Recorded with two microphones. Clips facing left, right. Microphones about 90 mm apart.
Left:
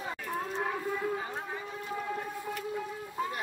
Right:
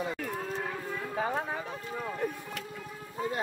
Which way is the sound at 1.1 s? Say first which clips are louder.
Right 5 dB; 75° right (ahead or behind).